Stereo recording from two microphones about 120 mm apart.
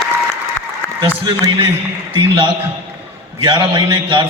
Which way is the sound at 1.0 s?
45° right (ahead or behind).